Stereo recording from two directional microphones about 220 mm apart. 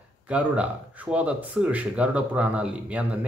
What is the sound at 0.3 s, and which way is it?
Speech, 5° right (ahead or behind).